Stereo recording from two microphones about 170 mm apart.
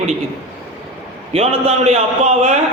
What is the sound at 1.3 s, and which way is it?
A man's voice, 35° right (ahead or behind).